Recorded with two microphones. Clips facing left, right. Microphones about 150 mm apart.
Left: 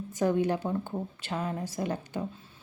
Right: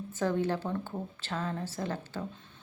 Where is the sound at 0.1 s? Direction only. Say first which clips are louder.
Left 3 dB; 15° left (ahead or behind).